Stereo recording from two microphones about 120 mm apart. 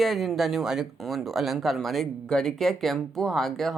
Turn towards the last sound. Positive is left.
turn(degrees=5)  # may be behind; listen again after turning